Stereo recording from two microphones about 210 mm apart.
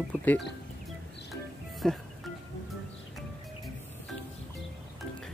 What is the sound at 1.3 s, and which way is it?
Music, centre (ahead or behind).